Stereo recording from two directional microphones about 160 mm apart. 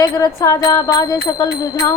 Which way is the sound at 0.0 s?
20° left (ahead or behind).